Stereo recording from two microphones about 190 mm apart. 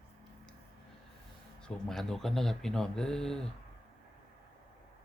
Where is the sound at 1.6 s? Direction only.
5° left (ahead or behind).